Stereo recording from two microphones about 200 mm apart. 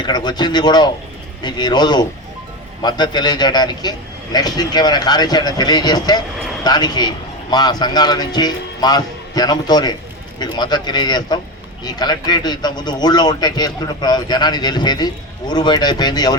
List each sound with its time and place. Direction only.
0.0 s a man's voice: 20° left (ahead or behind)